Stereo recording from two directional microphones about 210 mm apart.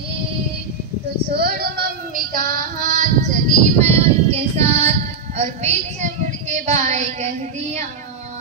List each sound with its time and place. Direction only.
1.3 s child singing: 50° right (ahead or behind); by 4.9 s 30° right (ahead or behind)
5.4 s a woman's voice: 30° right (ahead or behind)